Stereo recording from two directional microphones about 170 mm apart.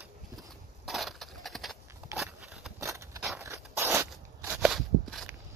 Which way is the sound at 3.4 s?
15° right (ahead or behind).